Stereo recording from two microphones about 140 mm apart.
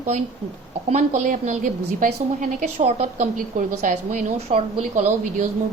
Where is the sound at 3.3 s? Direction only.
80° right.